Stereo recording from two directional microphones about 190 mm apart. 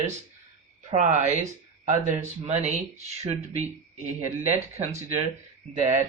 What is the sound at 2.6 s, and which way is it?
Speech, 35° right (ahead or behind).